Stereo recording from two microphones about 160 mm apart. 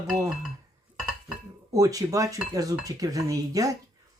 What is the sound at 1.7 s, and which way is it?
Speech, 20° right (ahead or behind).